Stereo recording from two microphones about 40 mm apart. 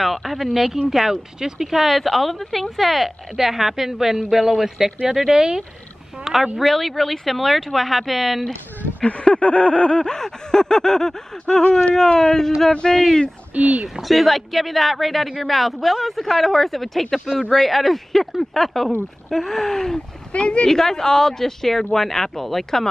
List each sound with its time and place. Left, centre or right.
0.0 s speech: centre
6.6 s speech: centre
9.0 s a sound: left
10.0 s speech: centre
13.6 s speech: right
14.0 s speech: centre
20.3 s speech: left
20.6 s speech: centre